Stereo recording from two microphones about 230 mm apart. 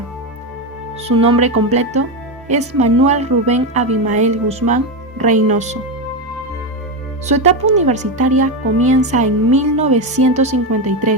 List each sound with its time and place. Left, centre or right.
1.0 s a woman's voice: right
7.3 s speech: right